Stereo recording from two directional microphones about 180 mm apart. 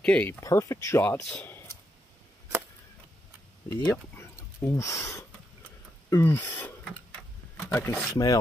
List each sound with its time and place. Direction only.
0.0 s speech: 10° left (ahead or behind)
3.7 s speech: 15° left (ahead or behind)
7.5 s a sound: 10° left (ahead or behind)
8.1 s filing: 20° left (ahead or behind)